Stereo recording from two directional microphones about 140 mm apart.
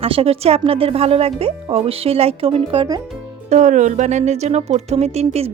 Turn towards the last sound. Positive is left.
turn(degrees=-45)  # may be behind; listen again after turning